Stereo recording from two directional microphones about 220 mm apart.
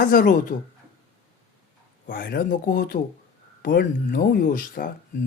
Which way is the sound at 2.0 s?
40° left (ahead or behind).